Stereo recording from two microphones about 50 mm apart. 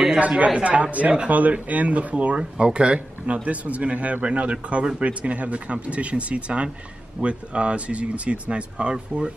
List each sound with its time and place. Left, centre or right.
0.5 s speech: right